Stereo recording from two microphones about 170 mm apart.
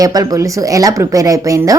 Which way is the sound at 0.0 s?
20° right (ahead or behind).